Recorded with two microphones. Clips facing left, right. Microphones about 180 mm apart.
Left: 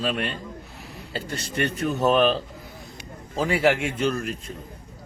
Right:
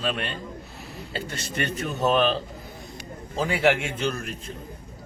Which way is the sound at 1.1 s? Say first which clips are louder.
Left 3 dB; 40° left (ahead or behind).